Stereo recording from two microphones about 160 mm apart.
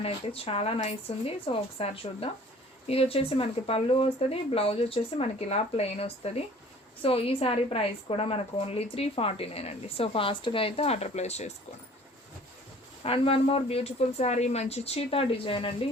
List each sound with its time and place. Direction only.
0.0 s a woman's voice: 35° left (ahead or behind)
13.0 s a woman's voice: 35° left (ahead or behind)